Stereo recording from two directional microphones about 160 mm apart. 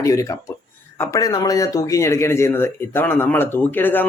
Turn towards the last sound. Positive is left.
turn(degrees=10)  # may be behind; listen again after turning